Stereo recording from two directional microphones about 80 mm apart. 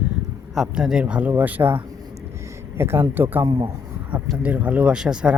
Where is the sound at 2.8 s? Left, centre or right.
Right.